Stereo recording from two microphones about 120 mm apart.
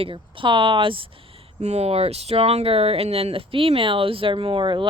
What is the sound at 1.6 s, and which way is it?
Speech, 65° right (ahead or behind).